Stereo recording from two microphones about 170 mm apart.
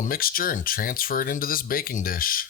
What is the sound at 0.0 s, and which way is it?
Speech, 60° left (ahead or behind).